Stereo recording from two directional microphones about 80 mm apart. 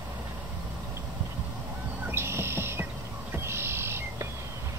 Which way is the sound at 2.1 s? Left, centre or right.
Right.